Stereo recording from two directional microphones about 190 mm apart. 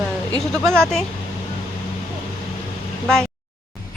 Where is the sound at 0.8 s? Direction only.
5° left (ahead or behind).